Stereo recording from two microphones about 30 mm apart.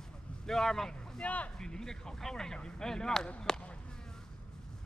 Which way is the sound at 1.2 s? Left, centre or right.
Left.